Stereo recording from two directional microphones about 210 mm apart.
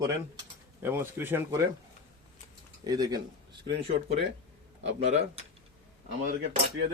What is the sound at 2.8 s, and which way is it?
Speech, 20° right (ahead or behind).